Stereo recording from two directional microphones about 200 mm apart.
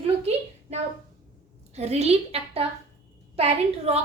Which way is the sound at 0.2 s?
30° right (ahead or behind).